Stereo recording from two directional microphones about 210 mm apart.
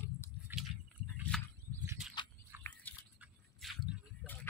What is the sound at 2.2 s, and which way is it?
Biting, 20° left (ahead or behind).